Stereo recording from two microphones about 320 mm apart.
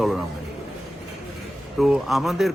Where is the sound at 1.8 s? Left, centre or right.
Centre.